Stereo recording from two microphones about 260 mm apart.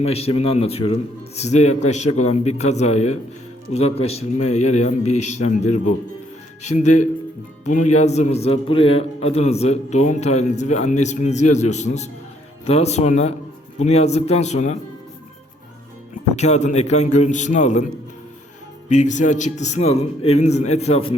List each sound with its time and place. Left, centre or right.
0.0 s a man's voice: left
16.3 s a man's voice: left
18.9 s a man's voice: left